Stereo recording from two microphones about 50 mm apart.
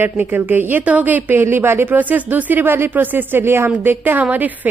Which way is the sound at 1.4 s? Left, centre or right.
Right.